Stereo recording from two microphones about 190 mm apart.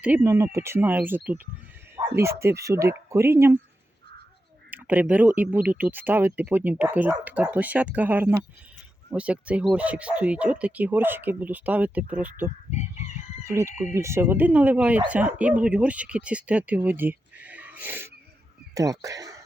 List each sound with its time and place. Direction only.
0.0 s speech: 10° right (ahead or behind)
4.7 s speech: 10° right (ahead or behind)
13.4 s speech: 15° right (ahead or behind)